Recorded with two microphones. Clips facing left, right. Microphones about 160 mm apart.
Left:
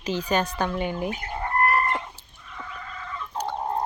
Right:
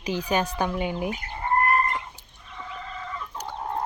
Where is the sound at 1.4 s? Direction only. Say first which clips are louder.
Right 1 dB; 85° left.